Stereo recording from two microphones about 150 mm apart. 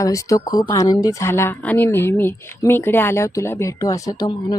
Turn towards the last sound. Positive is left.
turn(degrees=25)  # may be behind; listen again after turning